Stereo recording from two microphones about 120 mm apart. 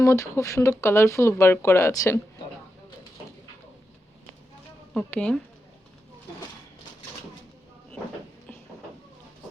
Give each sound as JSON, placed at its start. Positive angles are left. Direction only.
{"t": 0.0, "sound": "speech", "side_deg": 25}
{"t": 4.9, "sound": "speech", "side_deg": 5}